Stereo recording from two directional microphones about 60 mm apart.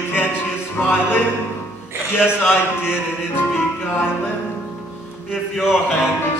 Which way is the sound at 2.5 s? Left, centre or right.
Left.